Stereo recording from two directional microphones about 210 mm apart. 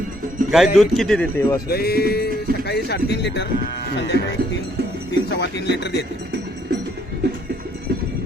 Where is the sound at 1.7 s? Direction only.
50° left (ahead or behind).